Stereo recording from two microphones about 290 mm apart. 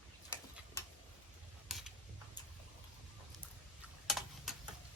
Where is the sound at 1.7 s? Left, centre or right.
Centre.